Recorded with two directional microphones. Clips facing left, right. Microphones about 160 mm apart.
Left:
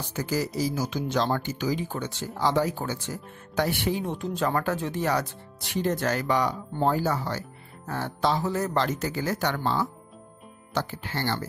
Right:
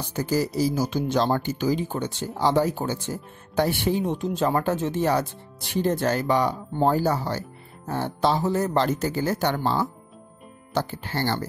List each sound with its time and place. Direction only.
0.1 s speech: 35° right (ahead or behind)
9.6 s speech: 40° right (ahead or behind)